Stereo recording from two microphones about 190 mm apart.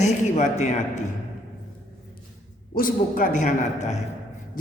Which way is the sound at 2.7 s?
45° left (ahead or behind).